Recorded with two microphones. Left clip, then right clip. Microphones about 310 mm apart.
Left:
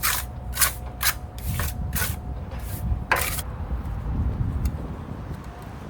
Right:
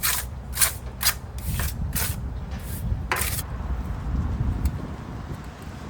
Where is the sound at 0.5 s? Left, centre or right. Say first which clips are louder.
Left 1 dB; centre.